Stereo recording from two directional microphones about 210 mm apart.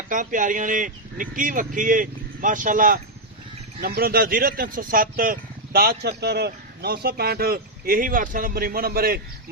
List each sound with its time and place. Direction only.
0.1 s speech: 40° right (ahead or behind)